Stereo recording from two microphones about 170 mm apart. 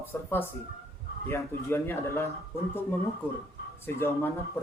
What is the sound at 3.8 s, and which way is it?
Speech, 15° left (ahead or behind).